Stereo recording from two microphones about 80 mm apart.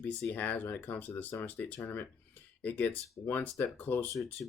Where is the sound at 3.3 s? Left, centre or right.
Left.